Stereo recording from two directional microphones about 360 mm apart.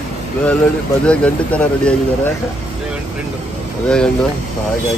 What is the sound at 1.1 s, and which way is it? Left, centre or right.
Speech, centre.